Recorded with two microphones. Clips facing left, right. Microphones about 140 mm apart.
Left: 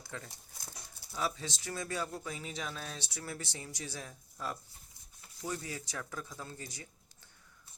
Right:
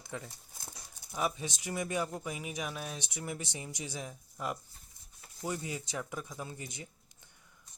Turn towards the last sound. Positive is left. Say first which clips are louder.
# right 3 dB
turn(degrees=-20)  # may be behind; listen again after turning